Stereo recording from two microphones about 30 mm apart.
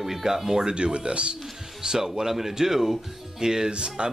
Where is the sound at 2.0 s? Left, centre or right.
Centre.